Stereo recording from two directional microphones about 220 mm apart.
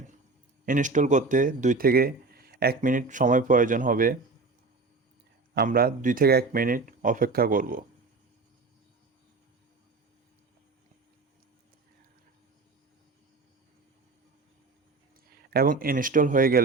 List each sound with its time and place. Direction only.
0.6 s speech: 35° right (ahead or behind)
5.5 s speech: 45° right (ahead or behind)
15.4 s speech: 45° right (ahead or behind)